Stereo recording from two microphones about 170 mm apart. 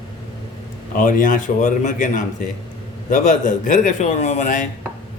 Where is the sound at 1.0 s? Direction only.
50° left (ahead or behind).